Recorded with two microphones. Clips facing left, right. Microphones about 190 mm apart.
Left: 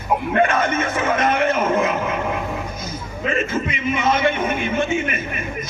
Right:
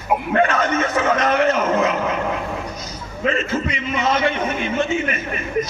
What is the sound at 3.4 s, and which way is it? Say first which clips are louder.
Speech: left 1 dB; 50° left (ahead or behind).